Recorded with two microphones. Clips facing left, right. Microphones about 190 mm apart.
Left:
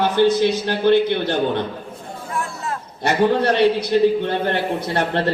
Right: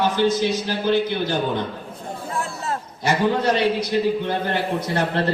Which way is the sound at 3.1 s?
65° left (ahead or behind).